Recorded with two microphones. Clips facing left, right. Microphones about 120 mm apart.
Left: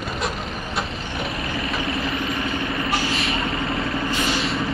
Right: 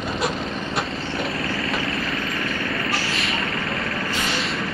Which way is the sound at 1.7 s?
25° left (ahead or behind).